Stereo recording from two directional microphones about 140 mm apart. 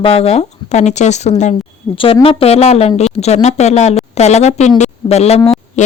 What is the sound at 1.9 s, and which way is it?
Speech, 40° left (ahead or behind).